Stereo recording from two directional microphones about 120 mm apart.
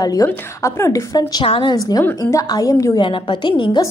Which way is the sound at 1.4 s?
50° left (ahead or behind).